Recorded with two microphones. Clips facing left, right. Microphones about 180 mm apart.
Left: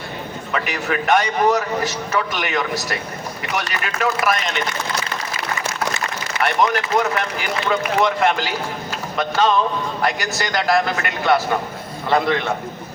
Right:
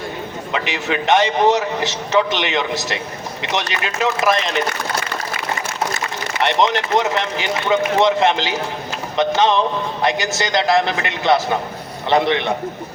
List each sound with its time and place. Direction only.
0.5 s speech: 20° right (ahead or behind)
6.4 s speech: 25° right (ahead or behind)